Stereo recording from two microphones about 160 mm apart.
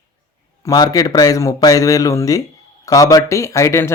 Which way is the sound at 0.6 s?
25° left (ahead or behind).